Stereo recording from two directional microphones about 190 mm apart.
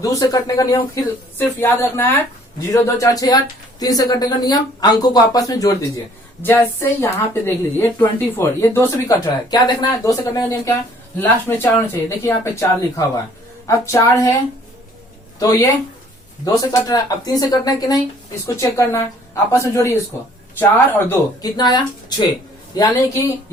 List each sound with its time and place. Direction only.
0.0 s speech: 20° left (ahead or behind)
15.4 s speech: 20° left (ahead or behind)